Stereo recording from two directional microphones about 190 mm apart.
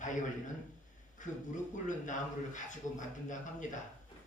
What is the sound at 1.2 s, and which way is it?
A man's voice, 40° left (ahead or behind).